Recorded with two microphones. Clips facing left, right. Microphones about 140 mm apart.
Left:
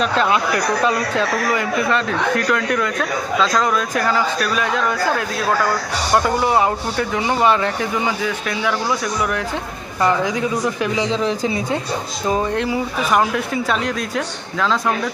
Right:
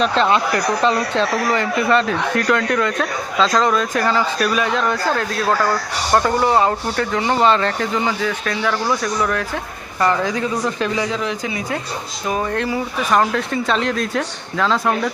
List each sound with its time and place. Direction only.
0.0 s speech: 5° left (ahead or behind)
6.2 s speech: 10° left (ahead or behind)
11.1 s speech: 30° left (ahead or behind)
12.3 s speech: 20° left (ahead or behind); by 14.9 s centre (ahead or behind)